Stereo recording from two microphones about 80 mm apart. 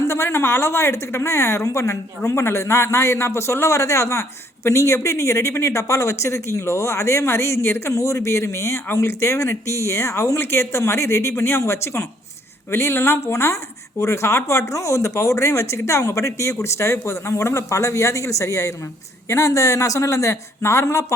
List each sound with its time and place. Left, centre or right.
0.1 s speech: left